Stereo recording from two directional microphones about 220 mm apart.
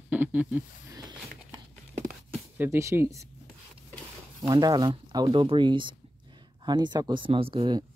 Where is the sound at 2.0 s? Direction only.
5° right (ahead or behind).